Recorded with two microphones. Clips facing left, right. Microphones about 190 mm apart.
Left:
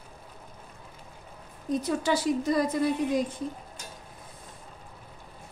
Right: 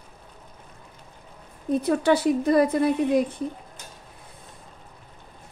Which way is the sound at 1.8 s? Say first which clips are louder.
Right 7 dB; 60° right (ahead or behind).